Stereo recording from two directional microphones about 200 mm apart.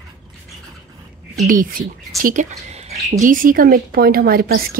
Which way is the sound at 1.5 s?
45° right (ahead or behind).